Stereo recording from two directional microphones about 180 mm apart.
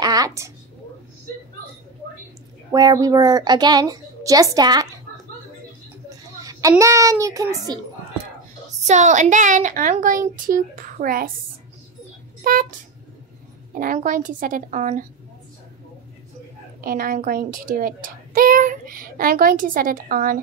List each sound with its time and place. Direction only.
0.0 s a sound: 20° right (ahead or behind)
2.7 s a child's voice: 20° right (ahead or behind)
6.0 s a sound: 20° right (ahead or behind)
6.8 s a child's voice: 15° right (ahead or behind)
8.8 s a child's voice: 40° right (ahead or behind)
12.4 s a child's voice: 50° right (ahead or behind)
13.7 s a child's voice: 50° right (ahead or behind)
16.8 s a child's voice: 55° right (ahead or behind)